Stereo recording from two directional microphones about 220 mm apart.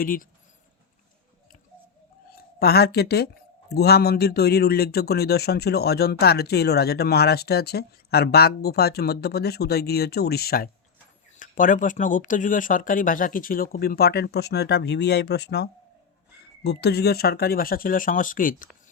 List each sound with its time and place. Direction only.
0.0 s speech: 40° left (ahead or behind)
2.3 s speech: 45° left (ahead or behind)